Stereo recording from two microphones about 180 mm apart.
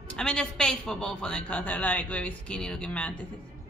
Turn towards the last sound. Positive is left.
turn(degrees=5)  # may be behind; listen again after turning